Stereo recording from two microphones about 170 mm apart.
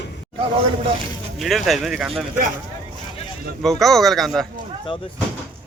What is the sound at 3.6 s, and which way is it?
Speech, centre (ahead or behind).